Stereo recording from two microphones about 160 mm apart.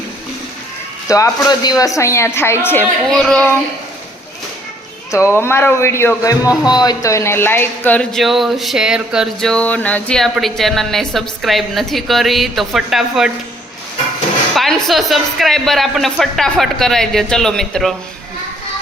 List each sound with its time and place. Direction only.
1.0 s a woman's voice: 20° left (ahead or behind); by 3.5 s 5° left (ahead or behind)
5.1 s a woman's voice: 15° left (ahead or behind); by 13.3 s centre (ahead or behind)
14.5 s music: centre (ahead or behind)
14.8 s speech: centre (ahead or behind)